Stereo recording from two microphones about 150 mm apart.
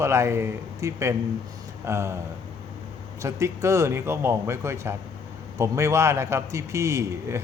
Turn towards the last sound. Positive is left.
turn(degrees=-20)  # may be behind; listen again after turning